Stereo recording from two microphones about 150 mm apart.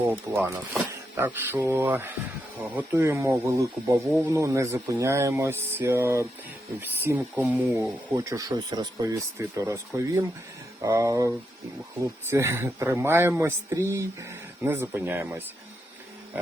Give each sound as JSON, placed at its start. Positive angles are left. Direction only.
{"t": 0.1, "sound": "speech", "side_deg": -15}
{"t": 7.7, "sound": "speech", "side_deg": -20}